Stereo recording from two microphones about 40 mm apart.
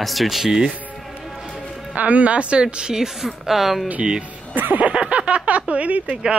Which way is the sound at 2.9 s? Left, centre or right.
Centre.